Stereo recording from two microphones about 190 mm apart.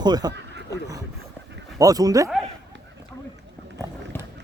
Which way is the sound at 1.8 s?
20° right (ahead or behind).